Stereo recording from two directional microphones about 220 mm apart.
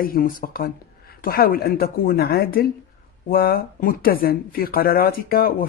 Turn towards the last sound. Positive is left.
turn(degrees=40)  # may be behind; listen again after turning